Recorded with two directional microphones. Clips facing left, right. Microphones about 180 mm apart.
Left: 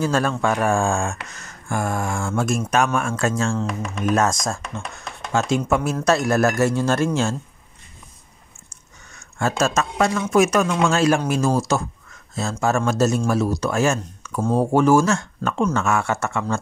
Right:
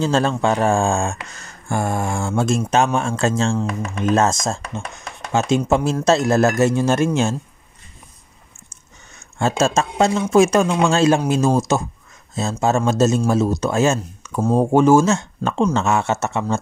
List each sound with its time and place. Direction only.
0.0 s speech: 25° right (ahead or behind)
8.6 s a sound: 25° right (ahead or behind)
10.3 s speech: 25° right (ahead or behind)